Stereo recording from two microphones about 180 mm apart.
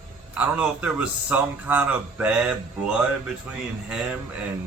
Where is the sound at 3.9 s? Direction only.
5° right (ahead or behind).